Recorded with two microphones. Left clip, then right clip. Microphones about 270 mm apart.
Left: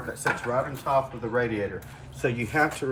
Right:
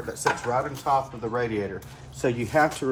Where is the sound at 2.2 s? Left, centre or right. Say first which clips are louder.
Right 2 dB; right.